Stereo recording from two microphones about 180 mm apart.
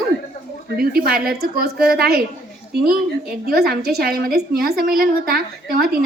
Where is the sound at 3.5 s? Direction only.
60° right (ahead or behind).